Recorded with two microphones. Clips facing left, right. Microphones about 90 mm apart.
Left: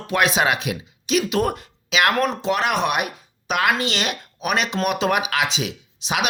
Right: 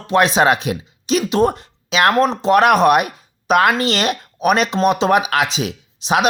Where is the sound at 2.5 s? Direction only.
50° right (ahead or behind).